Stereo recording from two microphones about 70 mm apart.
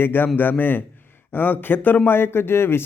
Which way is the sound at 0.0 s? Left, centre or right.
Left.